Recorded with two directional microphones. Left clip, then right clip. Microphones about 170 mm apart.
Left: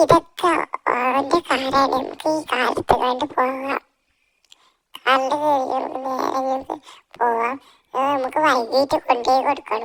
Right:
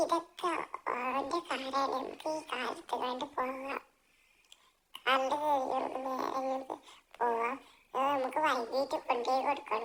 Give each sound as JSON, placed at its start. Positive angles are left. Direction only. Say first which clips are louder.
{"t": 0.0, "sound": "a child's voice", "louder": "left 17 dB", "side_deg": 45}
{"t": 4.9, "sound": "a woman's voice", "louder": "left 12 dB", "side_deg": 40}
{"t": 6.1, "sound": "a child's voice", "louder": "left 13 dB", "side_deg": 45}